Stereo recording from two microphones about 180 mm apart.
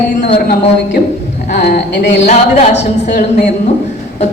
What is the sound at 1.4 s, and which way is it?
Speech, 55° left (ahead or behind).